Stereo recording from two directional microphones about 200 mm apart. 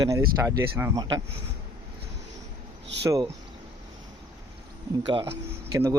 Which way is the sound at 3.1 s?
15° right (ahead or behind).